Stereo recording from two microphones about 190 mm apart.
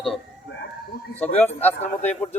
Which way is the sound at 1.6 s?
10° left (ahead or behind).